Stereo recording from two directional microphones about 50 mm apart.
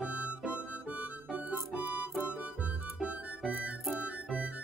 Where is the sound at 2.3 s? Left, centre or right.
Right.